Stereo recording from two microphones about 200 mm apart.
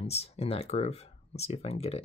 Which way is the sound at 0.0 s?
30° left (ahead or behind).